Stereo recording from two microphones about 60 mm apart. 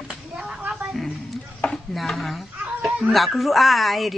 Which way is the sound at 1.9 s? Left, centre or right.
Centre.